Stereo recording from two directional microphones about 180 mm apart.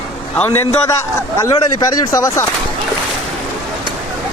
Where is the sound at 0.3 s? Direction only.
10° left (ahead or behind).